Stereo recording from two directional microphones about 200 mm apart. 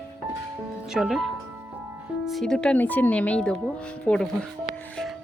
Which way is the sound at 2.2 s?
Centre (ahead or behind).